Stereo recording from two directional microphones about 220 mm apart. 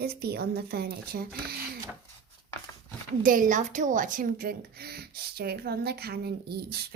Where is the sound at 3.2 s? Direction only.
40° right (ahead or behind).